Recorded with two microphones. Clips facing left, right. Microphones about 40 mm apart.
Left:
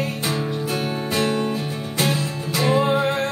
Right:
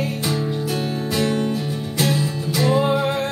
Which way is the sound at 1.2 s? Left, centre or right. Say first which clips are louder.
Right 1 dB; left.